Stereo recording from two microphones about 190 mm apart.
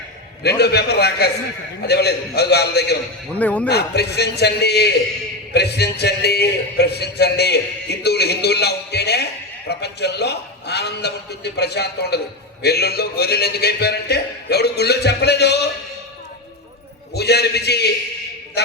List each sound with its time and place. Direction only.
0.4 s a man's voice: 60° left (ahead or behind)
3.3 s speech: 5° left (ahead or behind)
3.7 s a man's voice: 60° left (ahead or behind)
17.2 s a man's voice: 60° left (ahead or behind)